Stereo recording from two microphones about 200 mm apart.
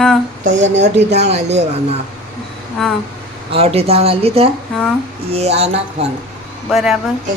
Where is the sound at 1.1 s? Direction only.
35° right (ahead or behind).